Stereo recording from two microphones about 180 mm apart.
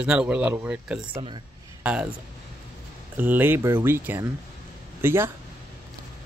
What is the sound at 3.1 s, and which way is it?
Speech, 10° right (ahead or behind).